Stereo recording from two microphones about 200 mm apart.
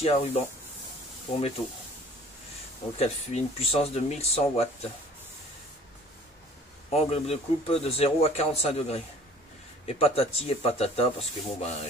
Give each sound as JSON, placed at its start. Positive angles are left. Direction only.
{"t": 0.0, "sound": "a man's voice", "side_deg": 30}
{"t": 3.0, "sound": "a man's voice", "side_deg": 30}
{"t": 6.9, "sound": "a man's voice", "side_deg": 30}